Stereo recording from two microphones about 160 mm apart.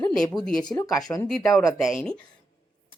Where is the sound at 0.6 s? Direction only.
20° left (ahead or behind).